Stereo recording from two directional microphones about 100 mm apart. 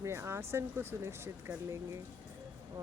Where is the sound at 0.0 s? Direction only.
25° right (ahead or behind).